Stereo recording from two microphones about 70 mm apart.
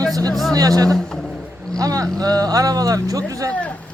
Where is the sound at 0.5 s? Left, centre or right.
Right.